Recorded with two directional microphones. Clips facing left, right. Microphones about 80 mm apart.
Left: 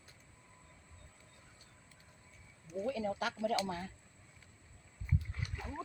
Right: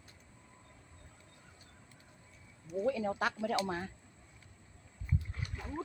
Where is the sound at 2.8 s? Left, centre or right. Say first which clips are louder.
Right 3 dB; right.